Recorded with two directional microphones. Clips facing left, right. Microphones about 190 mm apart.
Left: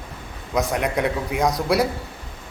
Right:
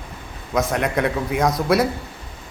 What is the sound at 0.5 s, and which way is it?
A man's voice, 15° left (ahead or behind).